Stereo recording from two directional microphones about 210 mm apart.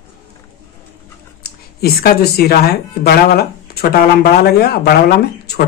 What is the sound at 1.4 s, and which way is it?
Speech, 45° left (ahead or behind).